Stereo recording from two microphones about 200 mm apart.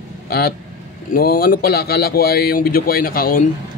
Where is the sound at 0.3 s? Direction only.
50° left (ahead or behind).